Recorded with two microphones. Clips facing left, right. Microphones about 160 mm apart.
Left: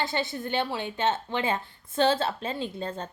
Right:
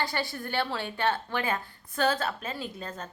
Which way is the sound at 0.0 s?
20° left (ahead or behind).